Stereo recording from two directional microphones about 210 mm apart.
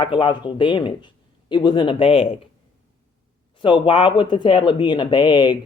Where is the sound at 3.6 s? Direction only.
25° left (ahead or behind).